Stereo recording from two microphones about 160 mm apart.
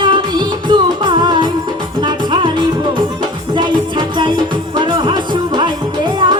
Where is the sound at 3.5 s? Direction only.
30° right (ahead or behind).